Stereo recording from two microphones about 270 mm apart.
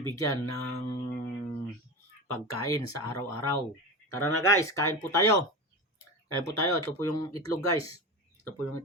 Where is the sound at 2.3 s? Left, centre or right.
Left.